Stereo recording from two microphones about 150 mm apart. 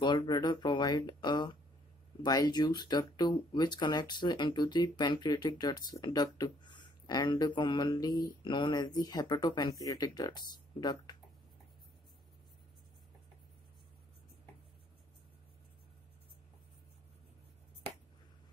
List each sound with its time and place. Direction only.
0.0 s speech: 30° left (ahead or behind)